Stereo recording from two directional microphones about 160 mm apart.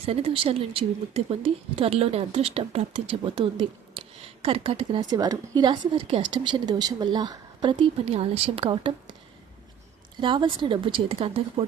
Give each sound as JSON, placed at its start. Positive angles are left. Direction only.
{"t": 0.0, "sound": "a woman's voice", "side_deg": -35}
{"t": 10.2, "sound": "a woman's voice", "side_deg": -30}